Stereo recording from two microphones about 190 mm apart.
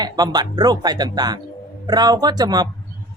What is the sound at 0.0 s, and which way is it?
A man's voice, 20° right (ahead or behind).